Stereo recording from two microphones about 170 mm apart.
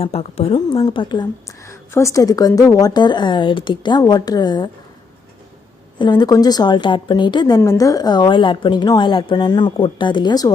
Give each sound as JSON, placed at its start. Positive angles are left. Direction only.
{"t": 0.0, "sound": "a woman's voice", "side_deg": 35}
{"t": 6.0, "sound": "a woman's voice", "side_deg": 25}